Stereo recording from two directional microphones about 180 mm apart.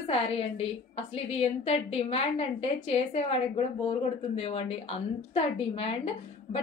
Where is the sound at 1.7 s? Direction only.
35° left (ahead or behind).